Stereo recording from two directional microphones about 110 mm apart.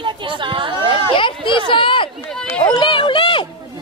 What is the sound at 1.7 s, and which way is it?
Speech, 50° left (ahead or behind).